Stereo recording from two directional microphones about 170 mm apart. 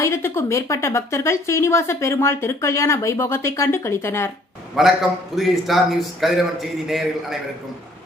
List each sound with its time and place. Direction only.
0.0 s a woman's voice: 15° left (ahead or behind)
4.8 s a man's voice: centre (ahead or behind)